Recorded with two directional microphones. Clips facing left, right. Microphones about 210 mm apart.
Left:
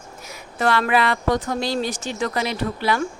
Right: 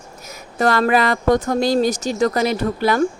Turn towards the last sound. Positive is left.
turn(degrees=-45)  # may be behind; listen again after turning